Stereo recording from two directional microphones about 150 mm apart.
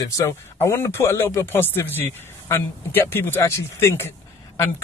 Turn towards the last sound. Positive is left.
turn(degrees=15)  # may be behind; listen again after turning